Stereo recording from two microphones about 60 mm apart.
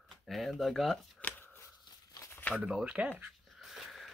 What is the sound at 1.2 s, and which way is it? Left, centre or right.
Chopping, left.